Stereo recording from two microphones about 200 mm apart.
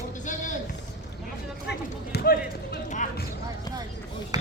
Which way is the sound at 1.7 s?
55° left (ahead or behind).